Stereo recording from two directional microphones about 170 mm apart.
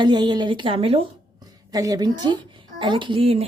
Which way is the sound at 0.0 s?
25° right (ahead or behind).